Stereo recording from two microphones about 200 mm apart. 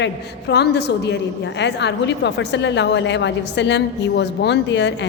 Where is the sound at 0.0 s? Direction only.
55° left (ahead or behind).